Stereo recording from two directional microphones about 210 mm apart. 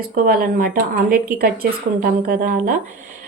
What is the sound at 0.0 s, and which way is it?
A woman's voice, 45° right (ahead or behind).